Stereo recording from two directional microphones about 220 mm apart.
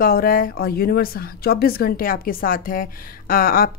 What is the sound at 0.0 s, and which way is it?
Speech, 40° left (ahead or behind).